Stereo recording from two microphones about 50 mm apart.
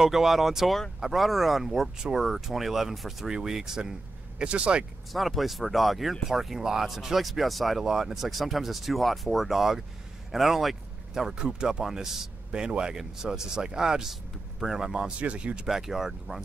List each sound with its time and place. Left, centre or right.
0.0 s speech: centre
4.4 s speech: right
5.1 s speech: centre
11.3 s speech: centre
15.1 s speech: right
15.6 s speech: centre